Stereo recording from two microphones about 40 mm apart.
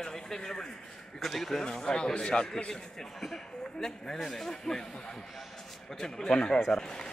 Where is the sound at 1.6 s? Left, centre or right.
Left.